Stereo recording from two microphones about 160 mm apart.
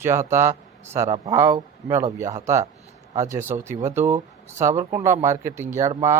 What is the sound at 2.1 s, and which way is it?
Speech, 15° right (ahead or behind).